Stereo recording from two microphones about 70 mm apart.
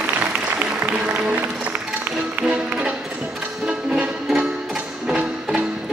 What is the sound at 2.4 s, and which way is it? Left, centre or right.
Music, centre.